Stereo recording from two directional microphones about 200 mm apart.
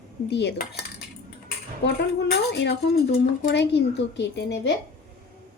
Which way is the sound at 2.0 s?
60° left (ahead or behind).